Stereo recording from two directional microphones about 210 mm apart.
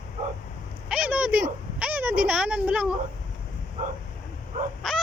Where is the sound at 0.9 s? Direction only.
5° right (ahead or behind).